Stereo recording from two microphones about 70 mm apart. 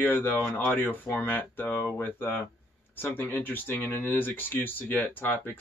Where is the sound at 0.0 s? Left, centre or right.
Left.